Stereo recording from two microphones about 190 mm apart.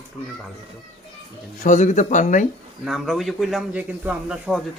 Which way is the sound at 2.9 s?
Centre (ahead or behind).